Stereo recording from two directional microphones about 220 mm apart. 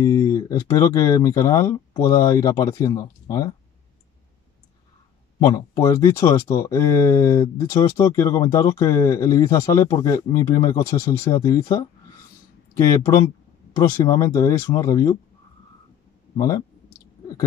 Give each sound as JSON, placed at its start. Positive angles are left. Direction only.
{"t": 0.0, "sound": "speech", "side_deg": 15}
{"t": 5.4, "sound": "speech", "side_deg": 15}
{"t": 16.3, "sound": "speech", "side_deg": 15}